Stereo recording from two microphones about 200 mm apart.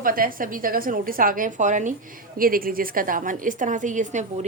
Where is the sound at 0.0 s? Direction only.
45° right (ahead or behind).